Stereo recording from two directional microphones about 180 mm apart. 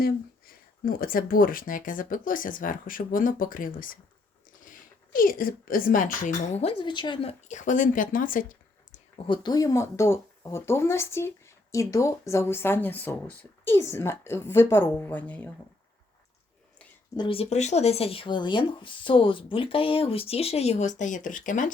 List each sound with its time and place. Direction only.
0.0 s a woman's voice: 55° left (ahead or behind)
9.1 s speech: 30° left (ahead or behind); by 15.4 s 10° left (ahead or behind)
17.2 s speech: 30° left (ahead or behind); by 21.7 s 45° left (ahead or behind)